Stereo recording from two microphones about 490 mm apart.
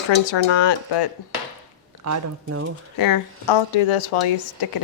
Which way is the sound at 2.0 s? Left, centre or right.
Right.